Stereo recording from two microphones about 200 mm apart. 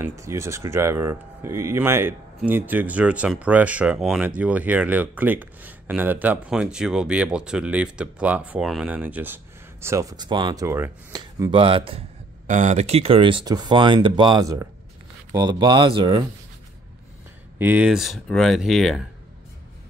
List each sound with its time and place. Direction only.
0.0 s speech: 15° right (ahead or behind)
12.4 s speech: 35° right (ahead or behind)
17.6 s speech: 10° right (ahead or behind)